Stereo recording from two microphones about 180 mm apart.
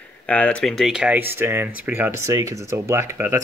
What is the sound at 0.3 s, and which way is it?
Speech, 5° left (ahead or behind).